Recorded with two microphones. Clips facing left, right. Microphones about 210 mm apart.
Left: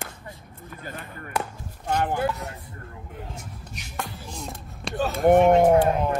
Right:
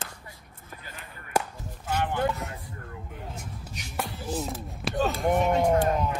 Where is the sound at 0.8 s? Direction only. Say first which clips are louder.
Left 10 dB; 45° left (ahead or behind).